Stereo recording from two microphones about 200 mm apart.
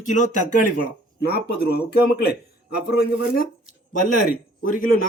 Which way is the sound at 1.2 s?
50° left (ahead or behind).